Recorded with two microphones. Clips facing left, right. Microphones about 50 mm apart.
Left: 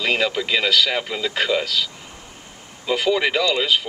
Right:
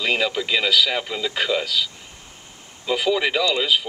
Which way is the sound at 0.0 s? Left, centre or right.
Centre.